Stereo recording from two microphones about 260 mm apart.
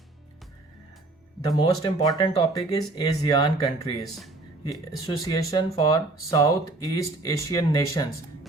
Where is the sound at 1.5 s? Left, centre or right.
Centre.